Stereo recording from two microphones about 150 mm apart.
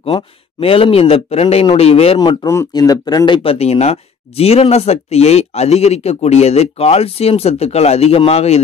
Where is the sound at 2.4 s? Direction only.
20° left (ahead or behind).